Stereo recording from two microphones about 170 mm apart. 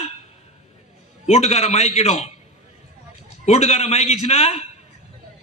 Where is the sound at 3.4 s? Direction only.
40° left (ahead or behind).